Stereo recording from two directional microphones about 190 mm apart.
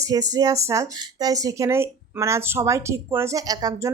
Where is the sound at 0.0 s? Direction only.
20° right (ahead or behind).